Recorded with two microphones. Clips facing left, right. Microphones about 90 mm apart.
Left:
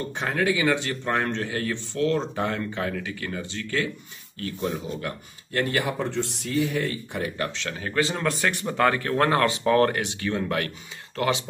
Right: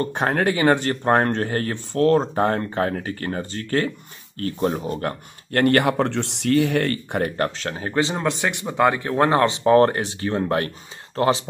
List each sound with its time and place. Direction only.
0.0 s speech: 50° right (ahead or behind); by 11.4 s 35° right (ahead or behind)